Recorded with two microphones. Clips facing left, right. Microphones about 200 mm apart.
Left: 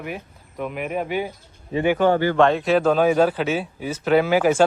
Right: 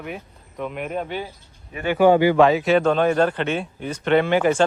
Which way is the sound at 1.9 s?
15° right (ahead or behind).